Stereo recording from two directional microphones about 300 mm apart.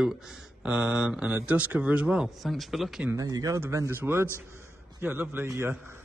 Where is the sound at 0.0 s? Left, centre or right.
Centre.